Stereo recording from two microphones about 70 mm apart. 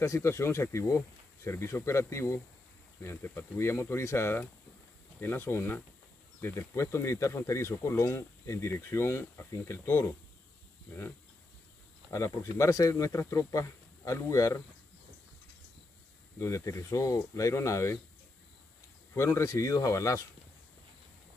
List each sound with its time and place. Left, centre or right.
0.0 s speech: left
12.1 s speech: left
16.3 s speech: left
19.1 s speech: left